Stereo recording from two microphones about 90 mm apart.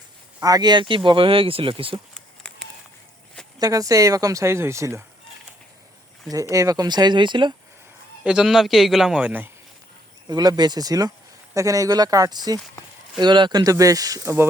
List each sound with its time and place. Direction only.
0.4 s speech: 45° right (ahead or behind); by 2.0 s 80° right
2.4 s a sound: 10° left (ahead or behind)
3.6 s speech: 40° right (ahead or behind)
6.5 s speech: 35° right (ahead or behind)
6.8 s speech: 50° right (ahead or behind)
8.2 s a man's voice: 10° right (ahead or behind)
9.2 s speech: 20° right (ahead or behind)
10.2 s speech: 45° right (ahead or behind)